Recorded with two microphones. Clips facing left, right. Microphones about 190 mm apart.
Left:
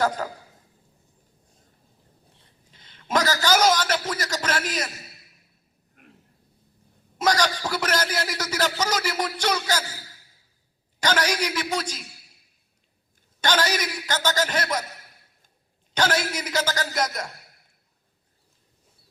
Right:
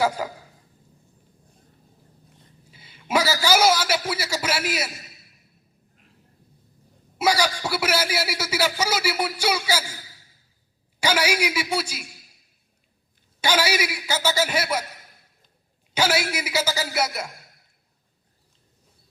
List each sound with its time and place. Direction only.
0.2 s a man's voice: 10° right (ahead or behind)
2.6 s a man's voice: 10° right (ahead or behind)
6.0 s a sound: 60° left (ahead or behind)
7.2 s a man's voice: 10° right (ahead or behind)
11.0 s a man's voice: 10° right (ahead or behind)
13.4 s a man's voice: 10° right (ahead or behind)
16.0 s a man's voice: 10° right (ahead or behind)